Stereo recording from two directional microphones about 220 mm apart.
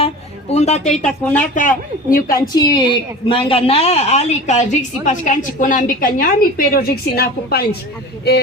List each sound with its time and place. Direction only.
0.5 s a woman's voice: 30° left (ahead or behind)
1.0 s a woman's voice: 5° left (ahead or behind)
1.5 s a woman's voice: 40° left (ahead or behind)
2.5 s a woman's voice: 20° left (ahead or behind); by 8.4 s 45° left (ahead or behind)